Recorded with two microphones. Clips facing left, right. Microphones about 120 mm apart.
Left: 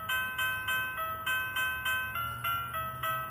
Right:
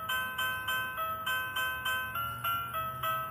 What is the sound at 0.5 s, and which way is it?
Music, 25° right (ahead or behind).